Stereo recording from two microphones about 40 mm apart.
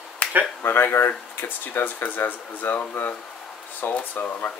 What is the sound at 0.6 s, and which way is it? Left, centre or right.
Speech, left.